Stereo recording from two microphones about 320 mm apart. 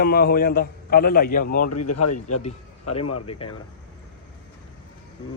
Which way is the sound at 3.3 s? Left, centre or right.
Centre.